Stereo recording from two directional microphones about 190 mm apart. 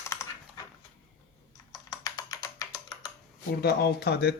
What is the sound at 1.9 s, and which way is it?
Typing, 15° left (ahead or behind).